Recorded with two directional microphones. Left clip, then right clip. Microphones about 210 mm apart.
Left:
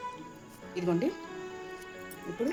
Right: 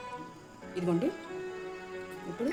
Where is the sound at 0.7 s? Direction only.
5° left (ahead or behind).